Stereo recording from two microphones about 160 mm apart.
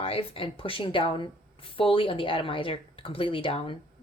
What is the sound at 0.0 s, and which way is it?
Speech, 35° left (ahead or behind).